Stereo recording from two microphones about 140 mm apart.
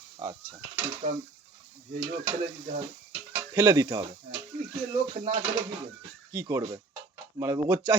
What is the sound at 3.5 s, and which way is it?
Speech, 25° right (ahead or behind).